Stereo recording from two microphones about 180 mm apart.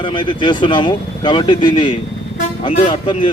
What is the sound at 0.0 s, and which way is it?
Speech, 30° left (ahead or behind).